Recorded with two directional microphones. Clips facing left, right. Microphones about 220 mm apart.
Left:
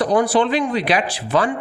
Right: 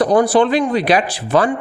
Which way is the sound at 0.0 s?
45° right (ahead or behind).